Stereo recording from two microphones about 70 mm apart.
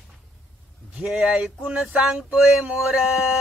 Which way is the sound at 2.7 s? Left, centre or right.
Centre.